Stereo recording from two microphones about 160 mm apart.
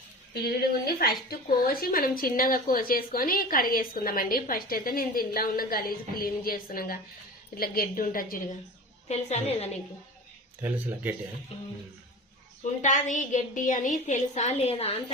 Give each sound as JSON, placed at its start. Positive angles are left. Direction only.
{"t": 0.4, "sound": "speech", "side_deg": 75}
{"t": 9.0, "sound": "a woman's voice", "side_deg": 45}
{"t": 10.6, "sound": "speech", "side_deg": -10}
{"t": 12.8, "sound": "a woman's voice", "side_deg": 50}